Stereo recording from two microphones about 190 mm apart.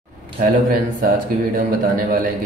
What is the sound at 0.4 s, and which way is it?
A man's voice, 45° right (ahead or behind).